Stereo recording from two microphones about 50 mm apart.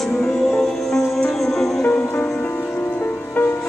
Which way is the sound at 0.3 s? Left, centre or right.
Centre.